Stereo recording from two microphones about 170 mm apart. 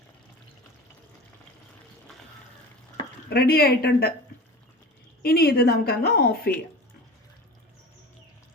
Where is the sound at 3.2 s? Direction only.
65° left (ahead or behind).